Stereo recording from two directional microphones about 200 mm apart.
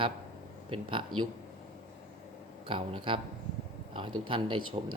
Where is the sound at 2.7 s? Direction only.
25° right (ahead or behind).